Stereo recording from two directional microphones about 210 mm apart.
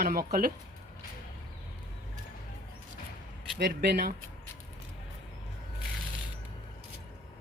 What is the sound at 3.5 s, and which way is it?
Speech, 50° right (ahead or behind).